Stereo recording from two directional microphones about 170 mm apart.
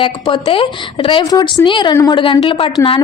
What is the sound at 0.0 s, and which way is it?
A woman's voice, 30° left (ahead or behind).